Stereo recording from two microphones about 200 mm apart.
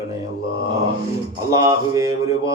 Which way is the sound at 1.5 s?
15° right (ahead or behind).